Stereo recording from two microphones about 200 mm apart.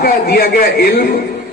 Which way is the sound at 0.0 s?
50° left (ahead or behind).